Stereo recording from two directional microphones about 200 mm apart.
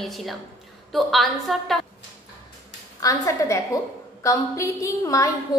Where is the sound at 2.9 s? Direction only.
15° left (ahead or behind).